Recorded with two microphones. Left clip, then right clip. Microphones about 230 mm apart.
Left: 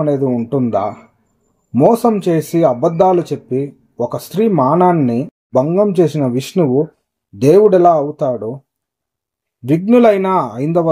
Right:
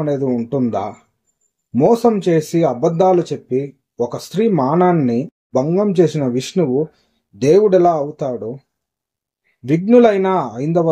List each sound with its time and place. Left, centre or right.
0.0 s speech: left
9.7 s speech: left